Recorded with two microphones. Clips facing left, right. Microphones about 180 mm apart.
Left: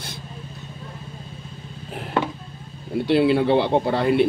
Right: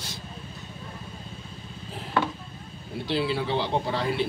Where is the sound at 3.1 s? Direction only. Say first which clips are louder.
Left 9 dB; 60° left (ahead or behind).